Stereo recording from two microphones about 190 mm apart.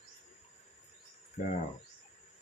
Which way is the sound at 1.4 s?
45° left (ahead or behind).